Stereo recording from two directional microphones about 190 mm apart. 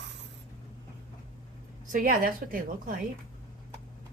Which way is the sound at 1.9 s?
50° right (ahead or behind).